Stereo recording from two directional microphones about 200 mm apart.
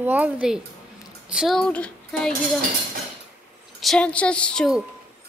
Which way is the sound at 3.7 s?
5° left (ahead or behind).